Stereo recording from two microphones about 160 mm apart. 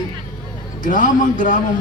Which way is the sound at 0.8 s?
55° left (ahead or behind).